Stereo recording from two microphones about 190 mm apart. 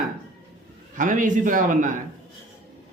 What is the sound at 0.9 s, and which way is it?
Speech, 45° right (ahead or behind).